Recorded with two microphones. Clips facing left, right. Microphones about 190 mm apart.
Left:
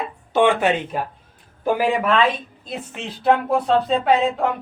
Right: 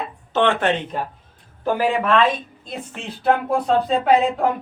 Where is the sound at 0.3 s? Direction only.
10° left (ahead or behind).